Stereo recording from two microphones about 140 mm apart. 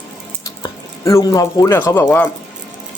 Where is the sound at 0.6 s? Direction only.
25° left (ahead or behind).